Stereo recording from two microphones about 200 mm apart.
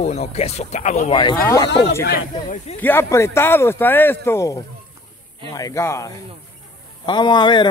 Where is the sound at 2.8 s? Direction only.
10° left (ahead or behind).